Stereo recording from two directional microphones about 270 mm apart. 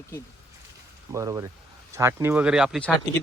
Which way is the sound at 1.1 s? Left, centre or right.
Centre.